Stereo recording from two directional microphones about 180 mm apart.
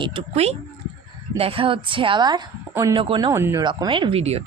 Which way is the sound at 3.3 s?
15° right (ahead or behind).